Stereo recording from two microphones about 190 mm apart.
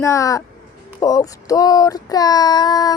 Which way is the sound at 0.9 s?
20° left (ahead or behind).